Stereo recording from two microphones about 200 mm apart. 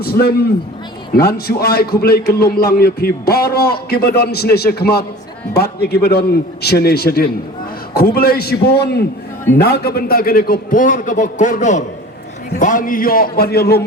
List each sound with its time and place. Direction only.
0.0 s a man's voice: 50° left (ahead or behind)